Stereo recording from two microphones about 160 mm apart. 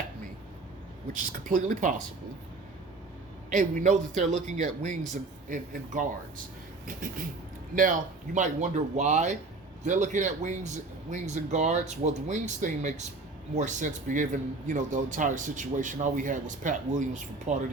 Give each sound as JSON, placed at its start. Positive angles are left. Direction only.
{"t": 1.1, "sound": "speech", "side_deg": -55}
{"t": 3.5, "sound": "a man's voice", "side_deg": -50}